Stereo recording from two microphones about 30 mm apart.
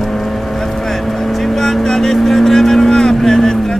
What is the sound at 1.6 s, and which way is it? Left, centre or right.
Vehicle, centre.